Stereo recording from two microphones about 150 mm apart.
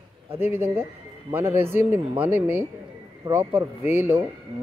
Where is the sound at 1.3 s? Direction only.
15° right (ahead or behind).